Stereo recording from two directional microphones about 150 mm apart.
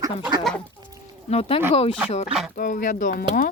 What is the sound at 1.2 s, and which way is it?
Speech, 45° left (ahead or behind).